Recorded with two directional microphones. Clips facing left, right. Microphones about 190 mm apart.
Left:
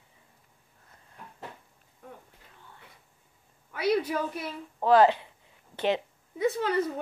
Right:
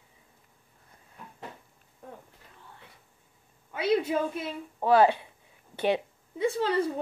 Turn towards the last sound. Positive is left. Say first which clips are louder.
# even
turn(degrees=-30)  # may be behind; listen again after turning